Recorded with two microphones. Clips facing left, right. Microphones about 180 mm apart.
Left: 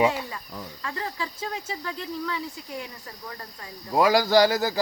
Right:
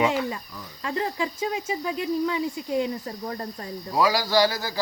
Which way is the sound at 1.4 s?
10° right (ahead or behind).